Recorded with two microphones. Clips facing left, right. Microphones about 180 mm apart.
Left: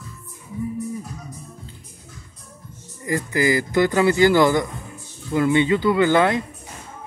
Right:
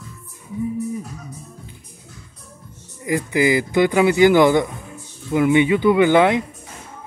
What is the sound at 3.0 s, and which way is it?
Speech, 15° right (ahead or behind).